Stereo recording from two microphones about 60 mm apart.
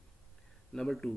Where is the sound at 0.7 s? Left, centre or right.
Centre.